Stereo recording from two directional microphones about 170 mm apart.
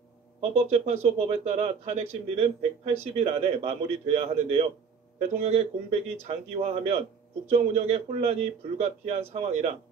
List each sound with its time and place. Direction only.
0.6 s speech: 40° right (ahead or behind)